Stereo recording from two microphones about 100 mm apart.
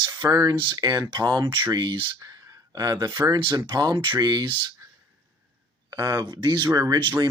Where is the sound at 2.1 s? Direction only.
35° right (ahead or behind).